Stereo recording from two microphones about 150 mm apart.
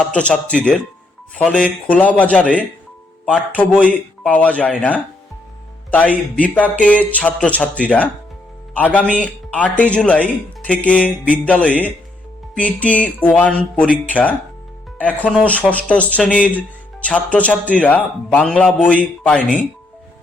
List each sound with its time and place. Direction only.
0.1 s speech: 10° left (ahead or behind)
5.9 s speech: 10° left (ahead or behind)